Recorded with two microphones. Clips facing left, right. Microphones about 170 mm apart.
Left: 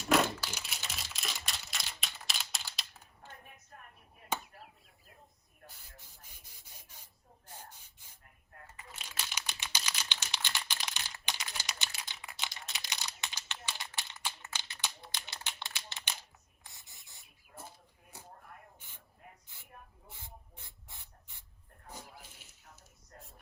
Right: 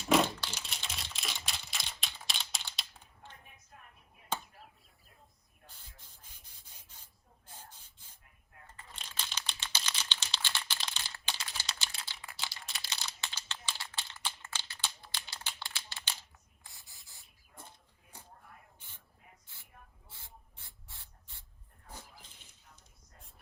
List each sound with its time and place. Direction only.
0.1 s crumpling: 5° left (ahead or behind)
5.6 s spray: 10° left (ahead or behind)
8.6 s typing: 10° left (ahead or behind)
16.6 s a sound: 20° left (ahead or behind)
18.8 s spray: 10° left (ahead or behind)
20.7 s ratchet: 15° left (ahead or behind)
21.9 s dog: 10° left (ahead or behind)